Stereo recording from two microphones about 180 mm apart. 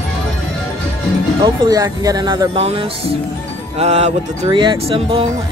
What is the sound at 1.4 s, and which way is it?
Speech, 20° right (ahead or behind).